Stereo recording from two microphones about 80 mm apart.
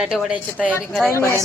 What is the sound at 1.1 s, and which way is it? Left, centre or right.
Speech, left.